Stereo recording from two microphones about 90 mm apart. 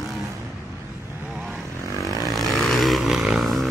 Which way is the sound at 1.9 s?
35° right (ahead or behind).